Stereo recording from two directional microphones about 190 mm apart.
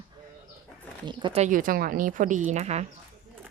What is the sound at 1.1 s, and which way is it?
Speech, 25° right (ahead or behind).